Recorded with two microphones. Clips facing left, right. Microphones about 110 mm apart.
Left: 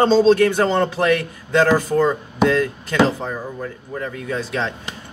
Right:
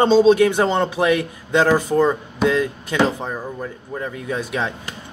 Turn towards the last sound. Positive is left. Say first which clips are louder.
# even
turn(degrees=-15)  # may be behind; listen again after turning